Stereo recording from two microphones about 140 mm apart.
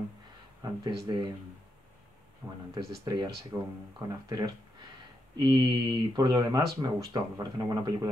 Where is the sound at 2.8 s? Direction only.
25° right (ahead or behind).